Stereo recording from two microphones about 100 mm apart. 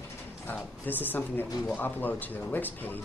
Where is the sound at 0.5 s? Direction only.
20° left (ahead or behind).